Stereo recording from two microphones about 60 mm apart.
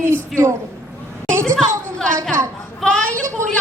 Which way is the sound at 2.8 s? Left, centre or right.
Centre.